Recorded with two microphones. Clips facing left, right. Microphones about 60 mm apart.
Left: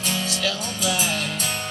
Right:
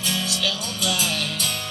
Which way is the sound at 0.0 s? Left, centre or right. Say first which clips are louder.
Left 1 dB; left.